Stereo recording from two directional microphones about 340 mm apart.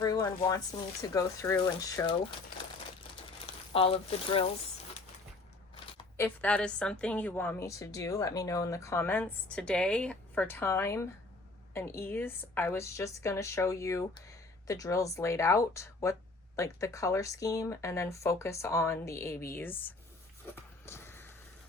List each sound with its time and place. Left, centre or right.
0.0 s a woman's voice: centre
3.7 s a woman's voice: centre
5.7 s a woman's voice: centre
20.8 s a sound: centre